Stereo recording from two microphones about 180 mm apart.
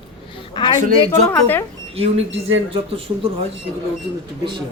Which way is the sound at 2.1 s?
90° right.